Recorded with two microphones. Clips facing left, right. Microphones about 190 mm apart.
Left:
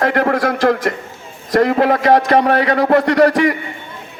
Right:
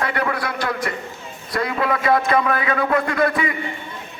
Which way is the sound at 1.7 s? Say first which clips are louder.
Left 8 dB; 40° left (ahead or behind).